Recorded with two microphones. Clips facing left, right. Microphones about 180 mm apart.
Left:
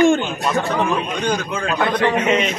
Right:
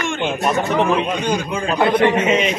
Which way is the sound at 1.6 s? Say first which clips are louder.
Right 4 dB; 25° right (ahead or behind).